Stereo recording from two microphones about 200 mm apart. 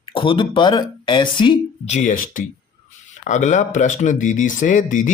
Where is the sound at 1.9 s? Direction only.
40° left (ahead or behind).